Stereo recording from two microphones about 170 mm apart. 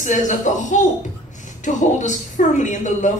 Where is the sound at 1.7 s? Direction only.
50° left (ahead or behind).